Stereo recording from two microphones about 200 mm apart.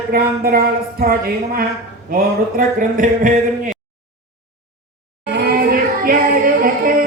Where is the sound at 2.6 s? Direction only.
40° right (ahead or behind).